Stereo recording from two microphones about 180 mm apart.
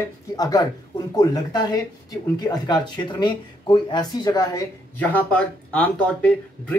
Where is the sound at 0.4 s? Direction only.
20° left (ahead or behind).